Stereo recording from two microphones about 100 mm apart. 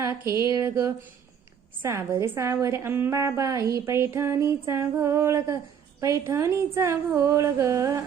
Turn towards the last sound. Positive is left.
turn(degrees=-30)  # may be behind; listen again after turning